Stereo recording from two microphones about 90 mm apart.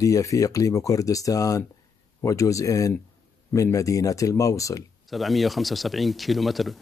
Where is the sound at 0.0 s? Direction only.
40° left (ahead or behind).